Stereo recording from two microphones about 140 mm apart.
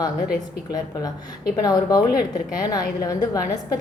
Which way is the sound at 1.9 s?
25° left (ahead or behind).